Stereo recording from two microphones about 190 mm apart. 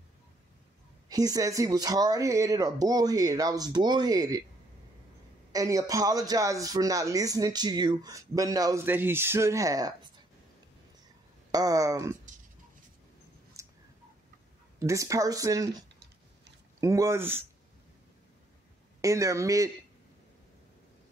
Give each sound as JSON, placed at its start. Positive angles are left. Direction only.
{"t": 1.0, "sound": "speech", "side_deg": -20}
{"t": 5.5, "sound": "a man's voice", "side_deg": -15}
{"t": 11.5, "sound": "a man's voice", "side_deg": -20}
{"t": 13.5, "sound": "clicking", "side_deg": -15}
{"t": 14.8, "sound": "a man's voice", "side_deg": -15}
{"t": 16.8, "sound": "a man's voice", "side_deg": -15}
{"t": 18.9, "sound": "a man's voice", "side_deg": -15}